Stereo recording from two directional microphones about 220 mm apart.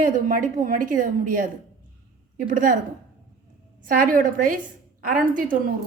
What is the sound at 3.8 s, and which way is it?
A woman's voice, 40° right (ahead or behind).